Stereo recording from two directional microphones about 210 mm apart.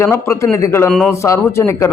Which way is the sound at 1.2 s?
15° left (ahead or behind).